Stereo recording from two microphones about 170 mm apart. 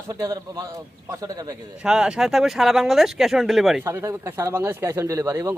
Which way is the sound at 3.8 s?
15° right (ahead or behind).